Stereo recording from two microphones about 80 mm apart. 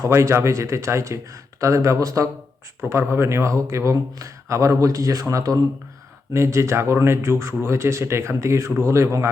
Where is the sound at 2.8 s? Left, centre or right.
Right.